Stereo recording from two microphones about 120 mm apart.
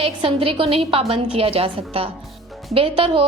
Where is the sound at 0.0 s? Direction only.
50° right (ahead or behind).